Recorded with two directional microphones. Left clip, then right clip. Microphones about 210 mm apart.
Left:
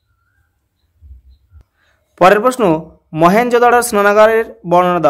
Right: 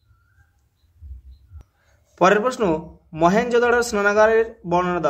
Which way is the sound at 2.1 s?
30° left (ahead or behind).